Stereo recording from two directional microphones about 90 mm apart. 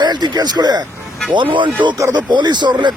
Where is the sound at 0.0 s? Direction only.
55° right (ahead or behind).